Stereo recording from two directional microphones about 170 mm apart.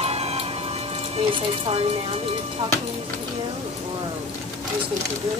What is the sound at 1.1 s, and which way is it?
Speech, 35° right (ahead or behind).